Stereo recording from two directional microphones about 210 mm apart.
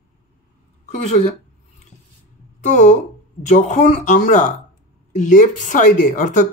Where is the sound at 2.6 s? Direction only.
35° left (ahead or behind).